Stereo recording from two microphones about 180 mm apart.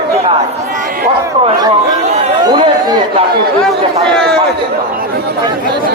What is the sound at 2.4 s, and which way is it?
Speech, 25° right (ahead or behind).